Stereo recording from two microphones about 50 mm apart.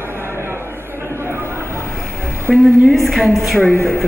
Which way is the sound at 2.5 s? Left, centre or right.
Centre.